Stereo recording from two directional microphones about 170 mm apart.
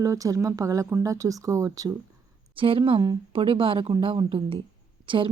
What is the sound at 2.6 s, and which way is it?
Speech, 30° right (ahead or behind).